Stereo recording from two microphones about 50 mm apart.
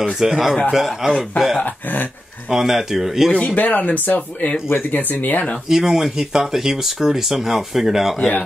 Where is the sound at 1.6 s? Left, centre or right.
Left.